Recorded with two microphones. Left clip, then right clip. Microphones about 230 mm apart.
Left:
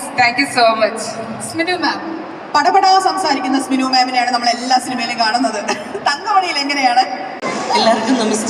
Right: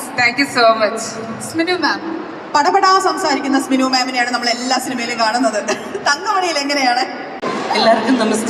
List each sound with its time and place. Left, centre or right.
0.2 s a woman's voice: centre